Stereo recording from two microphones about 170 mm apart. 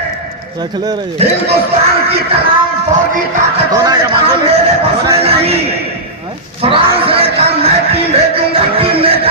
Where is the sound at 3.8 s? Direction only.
25° right (ahead or behind).